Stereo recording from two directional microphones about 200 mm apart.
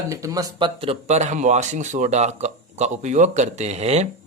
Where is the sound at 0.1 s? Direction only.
15° right (ahead or behind); by 4.1 s 35° right (ahead or behind).